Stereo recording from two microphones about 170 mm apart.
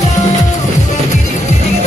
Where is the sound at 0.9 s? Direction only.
45° left (ahead or behind).